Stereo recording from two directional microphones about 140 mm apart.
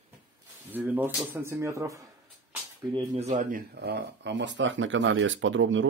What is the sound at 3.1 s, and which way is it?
Speech, 50° right (ahead or behind).